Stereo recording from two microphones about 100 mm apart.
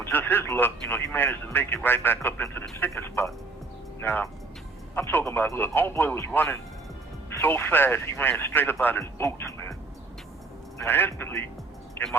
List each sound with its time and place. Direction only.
0.0 s speech: 20° left (ahead or behind)
10.8 s speech: 20° left (ahead or behind)